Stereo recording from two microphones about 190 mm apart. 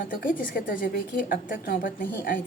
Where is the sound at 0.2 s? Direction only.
45° left (ahead or behind).